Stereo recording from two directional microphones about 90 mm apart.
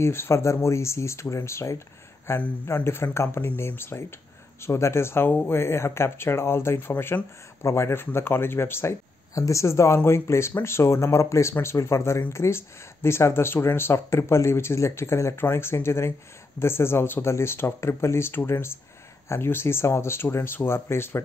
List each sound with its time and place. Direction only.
0.0 s speech: 30° left (ahead or behind)